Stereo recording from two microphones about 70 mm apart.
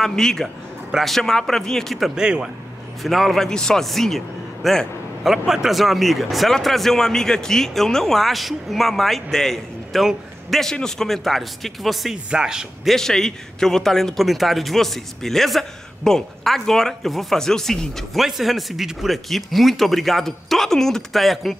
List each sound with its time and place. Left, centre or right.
0.0 s a man's voice: centre
2.2 s speech: centre
3.0 s a man's voice: centre
12.9 s a man's voice: centre